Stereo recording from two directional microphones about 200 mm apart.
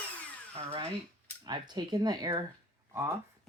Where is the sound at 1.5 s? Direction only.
20° right (ahead or behind).